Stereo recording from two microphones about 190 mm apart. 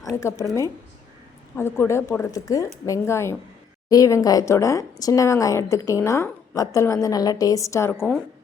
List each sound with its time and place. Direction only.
0.2 s speech: 15° left (ahead or behind)
1.5 s speech: 10° left (ahead or behind)